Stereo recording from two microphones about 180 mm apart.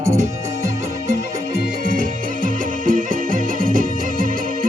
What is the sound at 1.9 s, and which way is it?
Music, 50° right (ahead or behind).